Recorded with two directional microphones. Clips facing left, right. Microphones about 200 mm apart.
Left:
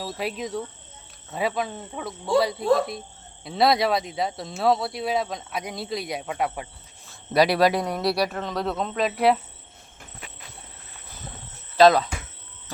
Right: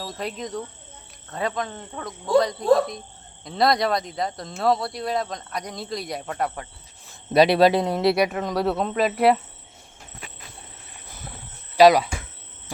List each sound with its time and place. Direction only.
0.0 s speech: 5° left (ahead or behind)
7.3 s speech: 25° right (ahead or behind)
8.3 s speech: 5° right (ahead or behind)
11.8 s speech: 10° right (ahead or behind)